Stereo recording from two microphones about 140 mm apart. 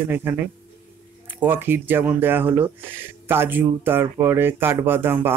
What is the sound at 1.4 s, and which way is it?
Speech, 15° right (ahead or behind).